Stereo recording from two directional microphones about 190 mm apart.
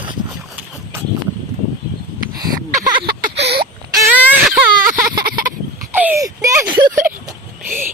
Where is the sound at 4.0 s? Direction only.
10° right (ahead or behind).